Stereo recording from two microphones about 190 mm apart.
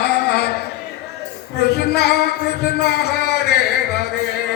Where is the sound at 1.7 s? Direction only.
60° left (ahead or behind).